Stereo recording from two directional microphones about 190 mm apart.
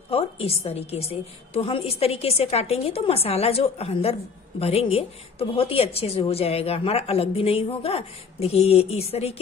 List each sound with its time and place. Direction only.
0.1 s a woman's voice: 30° left (ahead or behind)